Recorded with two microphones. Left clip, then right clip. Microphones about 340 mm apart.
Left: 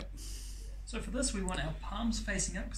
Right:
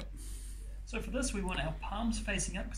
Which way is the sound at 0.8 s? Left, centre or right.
Centre.